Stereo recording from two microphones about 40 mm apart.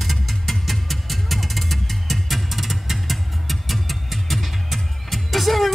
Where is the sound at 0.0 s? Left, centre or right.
Centre.